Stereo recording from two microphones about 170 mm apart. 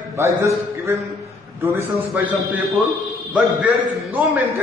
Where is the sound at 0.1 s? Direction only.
15° right (ahead or behind).